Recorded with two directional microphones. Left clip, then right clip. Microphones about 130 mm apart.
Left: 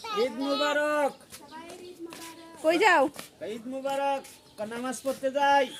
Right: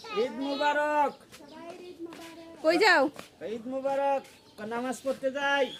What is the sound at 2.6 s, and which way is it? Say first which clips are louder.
Speech: left 1 dB; centre (ahead or behind).